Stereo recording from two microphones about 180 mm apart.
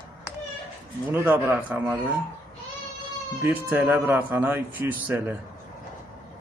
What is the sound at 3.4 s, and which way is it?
Speech, 10° right (ahead or behind).